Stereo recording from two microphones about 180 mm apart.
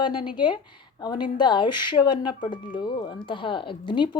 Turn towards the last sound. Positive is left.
turn(degrees=25)  # may be behind; listen again after turning